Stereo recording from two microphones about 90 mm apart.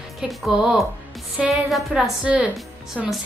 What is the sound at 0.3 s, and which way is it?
A woman's voice, 10° right (ahead or behind).